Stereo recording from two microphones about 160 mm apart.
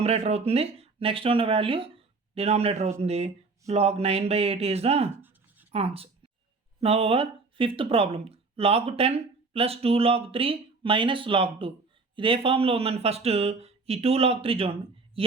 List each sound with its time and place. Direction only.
0.0 s speech: 40° right (ahead or behind)
5.7 s a sound: 40° right (ahead or behind)
6.7 s speech: 40° right (ahead or behind)